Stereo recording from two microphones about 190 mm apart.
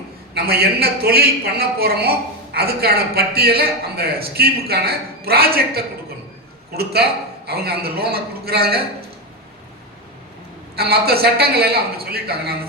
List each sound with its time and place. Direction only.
0.3 s a man's voice: 55° right (ahead or behind)
10.8 s a man's voice: 55° right (ahead or behind)